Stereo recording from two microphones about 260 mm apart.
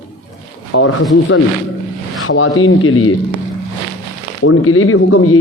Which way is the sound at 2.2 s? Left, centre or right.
Left.